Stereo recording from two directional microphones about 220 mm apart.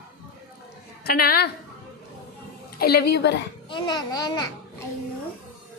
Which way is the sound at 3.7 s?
20° left (ahead or behind).